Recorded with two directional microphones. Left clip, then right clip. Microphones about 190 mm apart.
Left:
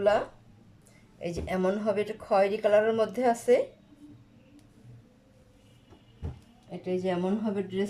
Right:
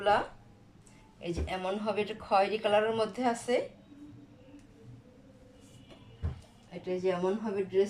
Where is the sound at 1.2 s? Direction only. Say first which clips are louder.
Left 5 dB; 35° left (ahead or behind).